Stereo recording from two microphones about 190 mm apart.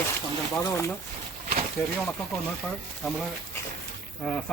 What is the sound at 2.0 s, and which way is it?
Speech, 10° left (ahead or behind).